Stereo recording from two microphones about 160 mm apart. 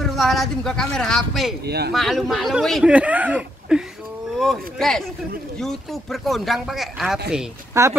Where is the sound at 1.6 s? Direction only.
90° right.